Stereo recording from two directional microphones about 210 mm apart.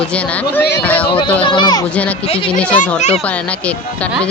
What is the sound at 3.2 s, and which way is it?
Speech, 5° left (ahead or behind).